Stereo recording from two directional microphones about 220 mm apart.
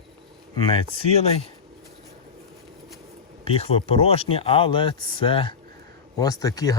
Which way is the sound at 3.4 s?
25° left (ahead or behind).